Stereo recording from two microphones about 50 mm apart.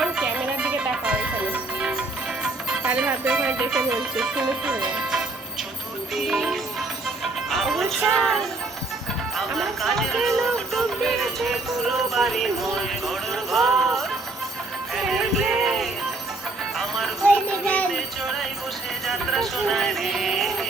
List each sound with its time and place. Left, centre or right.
0.0 s music: right
1.8 s music: centre
3.7 s music: centre
4.6 s speech: right
6.1 s music: centre
7.5 s speech: centre
9.5 s speech: centre
10.2 s music: centre
15.1 s music: centre
17.2 s music: left
17.9 s music: centre
19.0 s speech: centre